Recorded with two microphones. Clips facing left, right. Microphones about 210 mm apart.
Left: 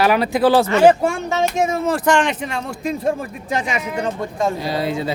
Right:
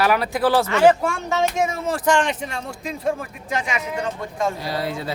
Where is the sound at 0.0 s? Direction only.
25° left (ahead or behind).